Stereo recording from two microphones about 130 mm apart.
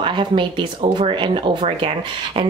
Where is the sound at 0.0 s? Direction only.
40° right (ahead or behind).